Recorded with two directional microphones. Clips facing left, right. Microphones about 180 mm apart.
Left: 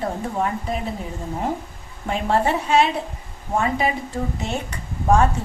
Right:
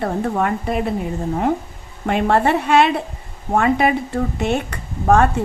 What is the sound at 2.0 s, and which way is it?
A woman's voice, 65° right (ahead or behind).